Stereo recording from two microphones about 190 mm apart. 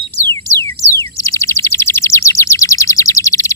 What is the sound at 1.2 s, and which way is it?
Bird, 15° left (ahead or behind).